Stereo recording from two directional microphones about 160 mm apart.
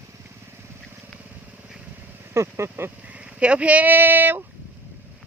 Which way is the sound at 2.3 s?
15° right (ahead or behind).